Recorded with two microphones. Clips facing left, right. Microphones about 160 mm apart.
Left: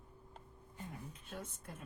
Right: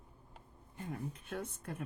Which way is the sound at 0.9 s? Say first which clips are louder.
Right 9 dB; 65° right (ahead or behind).